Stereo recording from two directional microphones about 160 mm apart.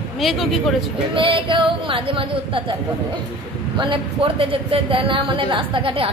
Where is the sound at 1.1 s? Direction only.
35° right (ahead or behind).